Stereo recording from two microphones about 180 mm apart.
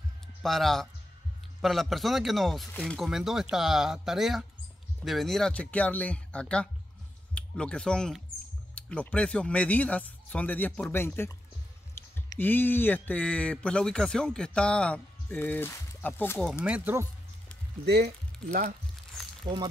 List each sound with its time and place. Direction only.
0.4 s speech: centre (ahead or behind)
16.6 s speech: 10° right (ahead or behind)
17.8 s speech: 65° right (ahead or behind)
19.4 s speech: 25° right (ahead or behind)